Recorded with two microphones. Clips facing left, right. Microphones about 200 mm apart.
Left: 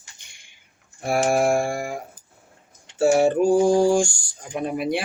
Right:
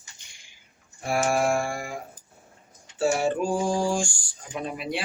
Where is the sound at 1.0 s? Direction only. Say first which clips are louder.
Left 4 dB; 40° left (ahead or behind).